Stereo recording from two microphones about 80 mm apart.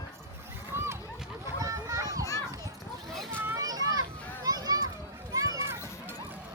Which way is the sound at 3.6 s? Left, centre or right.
Right.